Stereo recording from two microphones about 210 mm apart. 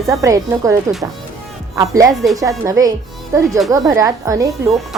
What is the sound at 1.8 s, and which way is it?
A woman's voice, 15° right (ahead or behind).